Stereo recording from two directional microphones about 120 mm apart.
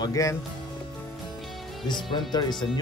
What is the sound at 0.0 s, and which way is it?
Speech, 25° left (ahead or behind).